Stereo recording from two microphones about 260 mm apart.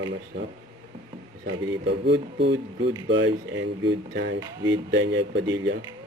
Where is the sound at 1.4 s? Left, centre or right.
Right.